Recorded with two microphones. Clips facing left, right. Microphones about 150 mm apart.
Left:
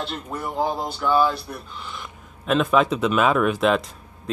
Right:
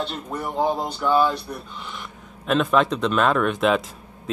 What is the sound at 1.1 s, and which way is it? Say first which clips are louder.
Speech: even; 5° left (ahead or behind).